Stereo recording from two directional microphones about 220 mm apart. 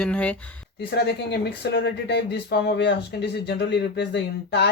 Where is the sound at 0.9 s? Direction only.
50° left (ahead or behind).